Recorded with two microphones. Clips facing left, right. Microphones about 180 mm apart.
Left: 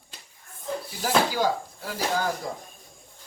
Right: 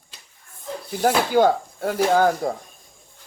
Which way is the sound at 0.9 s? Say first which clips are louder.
Right 6 dB; 55° right (ahead or behind).